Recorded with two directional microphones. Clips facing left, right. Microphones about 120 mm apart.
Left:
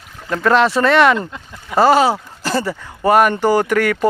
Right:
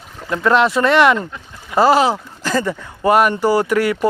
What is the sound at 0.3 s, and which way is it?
Speech, 15° right (ahead or behind).